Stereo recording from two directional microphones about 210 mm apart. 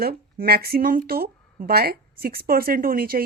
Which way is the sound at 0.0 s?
45° right (ahead or behind).